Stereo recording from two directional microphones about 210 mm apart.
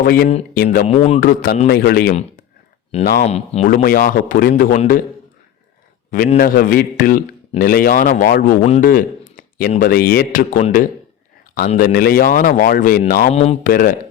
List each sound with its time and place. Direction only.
0.0 s a man's voice: 45° left (ahead or behind)
0.9 s speech: 30° left (ahead or behind)
1.6 s a man's voice: 45° left (ahead or behind)
3.2 s speech: 30° left (ahead or behind)
3.8 s speech: 40° left (ahead or behind)
6.1 s a man's voice: 40° left (ahead or behind)